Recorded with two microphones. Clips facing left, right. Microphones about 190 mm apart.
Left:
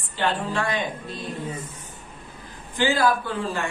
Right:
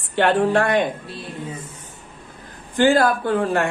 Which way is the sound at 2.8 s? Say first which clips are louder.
Right 5 dB; 55° right (ahead or behind).